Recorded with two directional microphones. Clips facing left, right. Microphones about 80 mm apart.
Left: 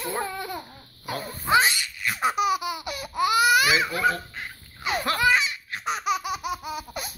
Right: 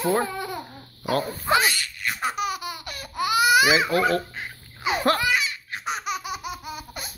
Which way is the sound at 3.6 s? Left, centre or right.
Centre.